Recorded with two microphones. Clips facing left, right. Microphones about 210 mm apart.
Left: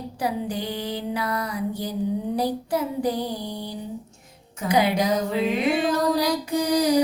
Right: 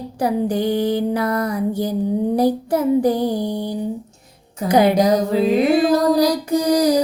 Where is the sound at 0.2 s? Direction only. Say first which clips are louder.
Right 8 dB; 45° right (ahead or behind).